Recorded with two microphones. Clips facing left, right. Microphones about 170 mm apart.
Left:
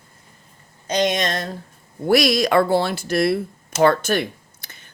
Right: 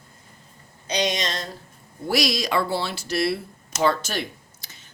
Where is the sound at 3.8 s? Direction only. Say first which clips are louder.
Left 6 dB; 55° left (ahead or behind).